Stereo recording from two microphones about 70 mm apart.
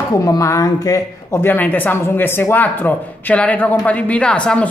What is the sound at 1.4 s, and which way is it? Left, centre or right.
Speech, left.